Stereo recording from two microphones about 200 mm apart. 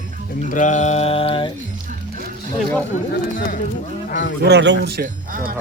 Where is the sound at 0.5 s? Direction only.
40° left (ahead or behind).